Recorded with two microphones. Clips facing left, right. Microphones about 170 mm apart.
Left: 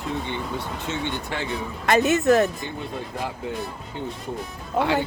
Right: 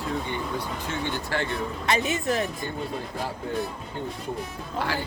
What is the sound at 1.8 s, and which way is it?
Speech, 45° left (ahead or behind).